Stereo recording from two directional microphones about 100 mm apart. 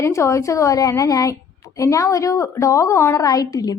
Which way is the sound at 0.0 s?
30° left (ahead or behind).